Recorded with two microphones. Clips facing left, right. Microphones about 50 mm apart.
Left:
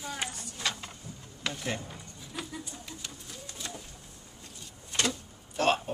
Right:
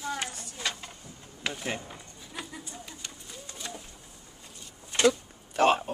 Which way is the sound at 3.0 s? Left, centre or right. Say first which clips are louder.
Even; centre.